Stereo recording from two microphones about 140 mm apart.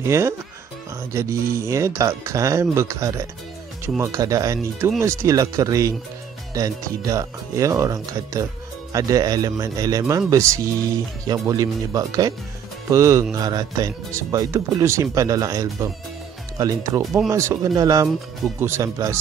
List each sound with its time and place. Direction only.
0.0 s speech: 20° right (ahead or behind)